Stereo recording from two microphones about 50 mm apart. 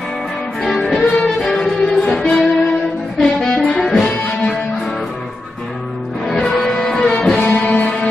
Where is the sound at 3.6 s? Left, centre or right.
Centre.